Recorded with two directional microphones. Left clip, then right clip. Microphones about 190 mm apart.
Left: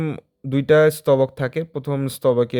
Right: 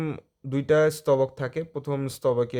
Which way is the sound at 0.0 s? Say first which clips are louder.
Left 5 dB; 20° left (ahead or behind).